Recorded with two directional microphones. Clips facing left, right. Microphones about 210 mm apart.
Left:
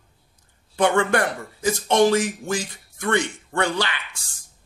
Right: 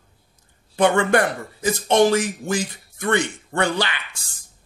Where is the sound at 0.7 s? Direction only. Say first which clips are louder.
Right 2 dB; 20° right (ahead or behind).